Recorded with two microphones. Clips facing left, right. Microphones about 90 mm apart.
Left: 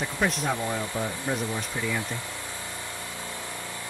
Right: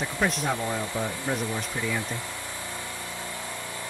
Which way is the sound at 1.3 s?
15° left (ahead or behind).